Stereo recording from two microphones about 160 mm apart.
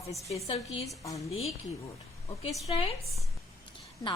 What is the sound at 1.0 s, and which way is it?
Speech, 20° left (ahead or behind).